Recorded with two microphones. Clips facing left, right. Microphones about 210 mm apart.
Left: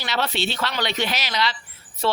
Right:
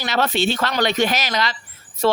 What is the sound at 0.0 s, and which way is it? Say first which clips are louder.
Speech: right 5 dB; 50° right (ahead or behind).